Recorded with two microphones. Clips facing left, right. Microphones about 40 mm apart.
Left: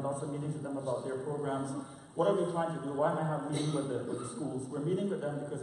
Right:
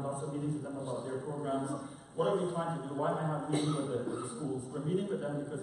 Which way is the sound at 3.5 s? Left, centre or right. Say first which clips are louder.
Right 2 dB; right.